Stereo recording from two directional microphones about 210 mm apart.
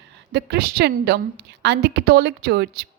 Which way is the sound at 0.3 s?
50° right (ahead or behind).